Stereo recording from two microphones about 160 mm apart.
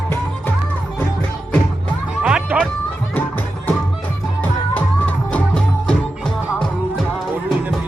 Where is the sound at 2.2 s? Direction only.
5° right (ahead or behind).